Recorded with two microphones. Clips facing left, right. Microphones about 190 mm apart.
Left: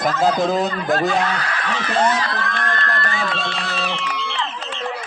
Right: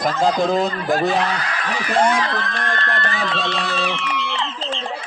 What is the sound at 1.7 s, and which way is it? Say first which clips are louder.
Speech: right 2 dB; 10° right (ahead or behind).